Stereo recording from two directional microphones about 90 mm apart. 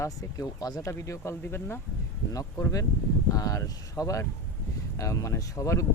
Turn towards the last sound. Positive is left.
turn(degrees=35)  # may be behind; listen again after turning